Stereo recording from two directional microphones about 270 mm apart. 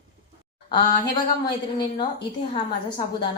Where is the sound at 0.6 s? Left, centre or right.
Centre.